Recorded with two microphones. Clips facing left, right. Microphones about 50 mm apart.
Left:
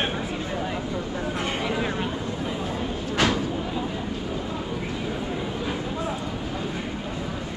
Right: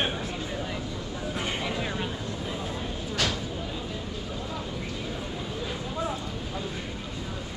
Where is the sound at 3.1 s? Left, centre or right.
Left.